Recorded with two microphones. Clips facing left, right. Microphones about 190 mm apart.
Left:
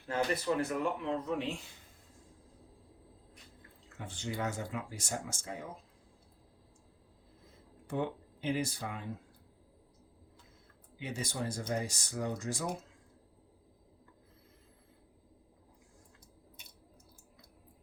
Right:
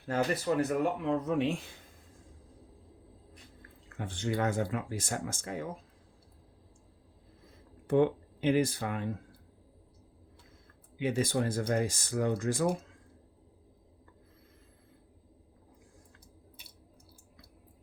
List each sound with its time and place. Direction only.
0.1 s speech: 40° right (ahead or behind)
3.9 s speech: 55° right (ahead or behind)
7.9 s speech: 60° right (ahead or behind)
10.9 s speech: 60° right (ahead or behind)
11.7 s speech: 80° right; by 12.7 s 55° right (ahead or behind)